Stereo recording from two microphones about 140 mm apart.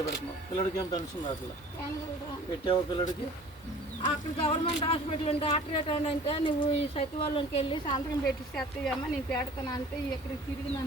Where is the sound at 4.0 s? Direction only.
40° left (ahead or behind).